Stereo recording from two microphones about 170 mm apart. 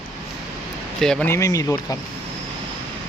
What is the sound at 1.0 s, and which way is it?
Speech, 5° left (ahead or behind).